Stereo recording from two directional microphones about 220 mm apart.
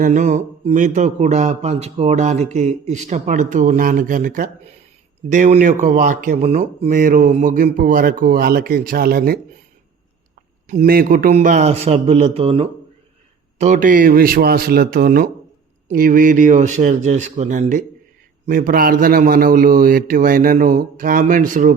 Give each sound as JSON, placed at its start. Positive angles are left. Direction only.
{"t": 0.0, "sound": "speech", "side_deg": -35}
{"t": 10.7, "sound": "speech", "side_deg": -40}